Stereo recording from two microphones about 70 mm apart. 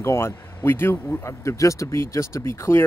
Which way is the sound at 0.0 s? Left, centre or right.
Left.